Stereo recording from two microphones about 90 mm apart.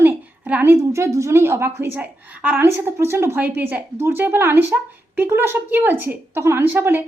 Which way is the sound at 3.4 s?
20° right (ahead or behind).